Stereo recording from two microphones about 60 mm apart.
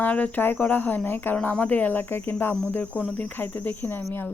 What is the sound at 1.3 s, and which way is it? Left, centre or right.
Cricket, left.